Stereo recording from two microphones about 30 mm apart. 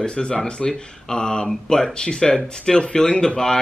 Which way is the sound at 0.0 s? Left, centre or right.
Left.